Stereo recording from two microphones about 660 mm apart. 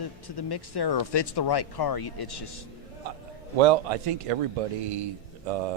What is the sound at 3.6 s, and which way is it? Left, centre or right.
Speech, right.